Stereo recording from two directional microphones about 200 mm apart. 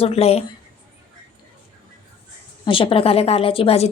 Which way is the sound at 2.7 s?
25° left (ahead or behind).